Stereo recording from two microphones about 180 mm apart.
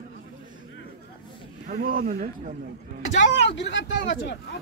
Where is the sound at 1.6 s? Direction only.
50° right (ahead or behind).